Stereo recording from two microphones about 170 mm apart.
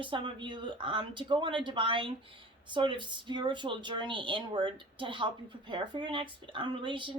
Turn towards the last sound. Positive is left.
turn(degrees=-30)  # may be behind; listen again after turning